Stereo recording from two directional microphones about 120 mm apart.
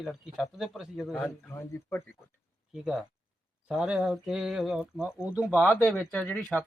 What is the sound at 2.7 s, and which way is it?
Speech, 5° right (ahead or behind).